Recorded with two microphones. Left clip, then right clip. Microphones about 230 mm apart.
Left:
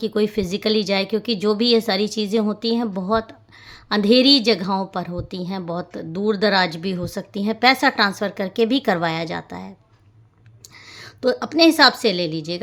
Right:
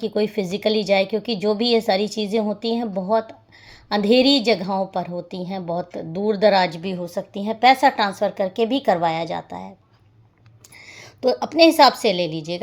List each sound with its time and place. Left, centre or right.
0.0 s a woman's voice: centre
10.9 s a sound: left
11.4 s a woman's voice: centre
12.0 s a woman's voice: left
12.3 s a woman's voice: centre